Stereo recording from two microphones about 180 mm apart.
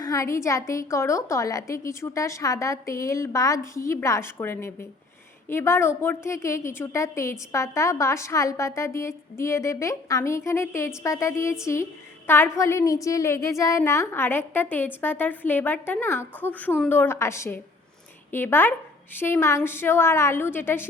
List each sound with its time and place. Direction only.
0.0 s a woman's voice: 20° left (ahead or behind)